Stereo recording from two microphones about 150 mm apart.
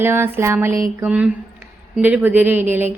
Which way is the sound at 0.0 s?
15° right (ahead or behind).